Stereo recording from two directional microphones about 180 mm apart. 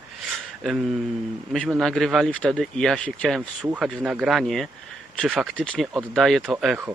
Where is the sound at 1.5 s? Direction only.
Centre (ahead or behind).